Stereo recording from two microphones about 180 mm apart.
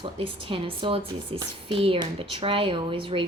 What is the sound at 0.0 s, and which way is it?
Speech, 30° right (ahead or behind).